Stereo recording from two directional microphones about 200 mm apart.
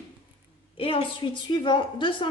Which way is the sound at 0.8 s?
30° left (ahead or behind).